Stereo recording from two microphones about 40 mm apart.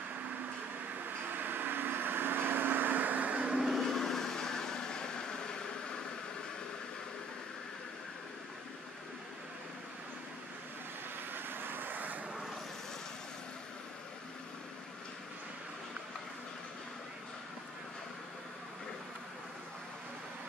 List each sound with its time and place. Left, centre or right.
1.0 s vehicle: right
3.5 s vehicle: centre
3.8 s vehicle: centre
11.3 s vehicle: right